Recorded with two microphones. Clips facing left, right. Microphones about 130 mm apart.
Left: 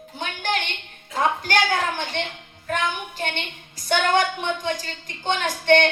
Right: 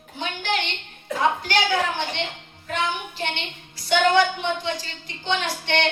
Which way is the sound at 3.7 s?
50° left (ahead or behind).